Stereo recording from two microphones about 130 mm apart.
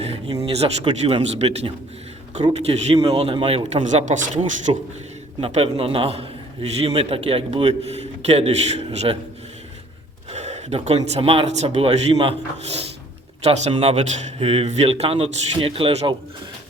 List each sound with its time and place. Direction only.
0.4 s a man's voice: 45° right (ahead or behind)
3.7 s speech: 60° right (ahead or behind)
5.4 s a man's voice: 50° right (ahead or behind)
10.3 s a man's voice: 60° right (ahead or behind)